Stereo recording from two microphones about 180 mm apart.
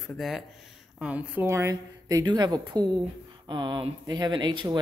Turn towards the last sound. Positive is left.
turn(degrees=-25)  # may be behind; listen again after turning